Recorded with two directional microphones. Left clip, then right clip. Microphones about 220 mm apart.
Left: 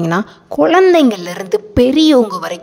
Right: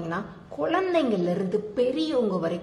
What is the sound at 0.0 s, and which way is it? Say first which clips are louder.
A woman's voice: left 14 dB; 50° left (ahead or behind).